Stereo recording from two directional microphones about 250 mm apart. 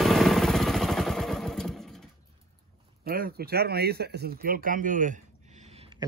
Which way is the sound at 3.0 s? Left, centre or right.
Right.